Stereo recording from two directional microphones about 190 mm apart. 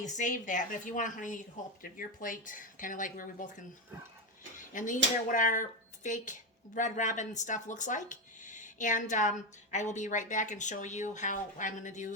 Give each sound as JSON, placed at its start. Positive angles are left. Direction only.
{"t": 0.0, "sound": "a woman's voice", "side_deg": 40}
{"t": 4.5, "sound": "a sound", "side_deg": 45}
{"t": 5.3, "sound": "a woman's voice", "side_deg": 40}